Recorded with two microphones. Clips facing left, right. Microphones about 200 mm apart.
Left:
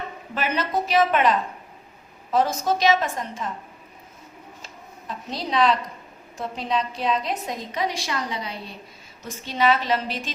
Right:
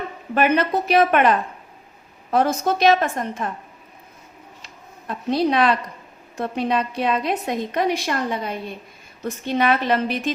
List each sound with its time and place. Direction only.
0.3 s a woman's voice: 55° right (ahead or behind)
5.0 s a woman's voice: 60° right (ahead or behind)